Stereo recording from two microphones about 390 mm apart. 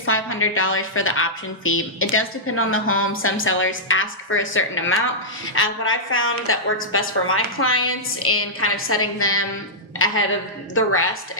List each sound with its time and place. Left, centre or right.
0.0 s a woman's voice: left